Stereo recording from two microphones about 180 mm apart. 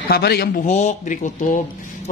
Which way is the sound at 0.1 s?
65° left (ahead or behind).